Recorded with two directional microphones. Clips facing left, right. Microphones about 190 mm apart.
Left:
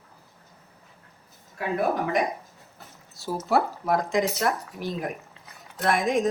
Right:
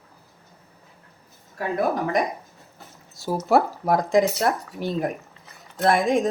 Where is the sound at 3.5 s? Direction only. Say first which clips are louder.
Right 4 dB; 35° right (ahead or behind).